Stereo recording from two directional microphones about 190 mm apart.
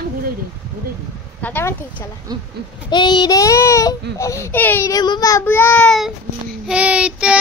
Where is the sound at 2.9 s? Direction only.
25° left (ahead or behind).